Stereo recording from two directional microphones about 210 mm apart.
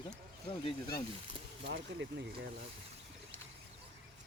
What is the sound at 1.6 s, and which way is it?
Speech, 55° right (ahead or behind).